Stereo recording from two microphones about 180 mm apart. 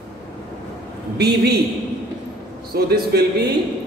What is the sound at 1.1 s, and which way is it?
Speech, 65° right (ahead or behind).